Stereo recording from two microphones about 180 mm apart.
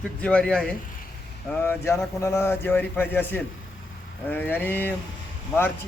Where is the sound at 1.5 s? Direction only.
10° left (ahead or behind).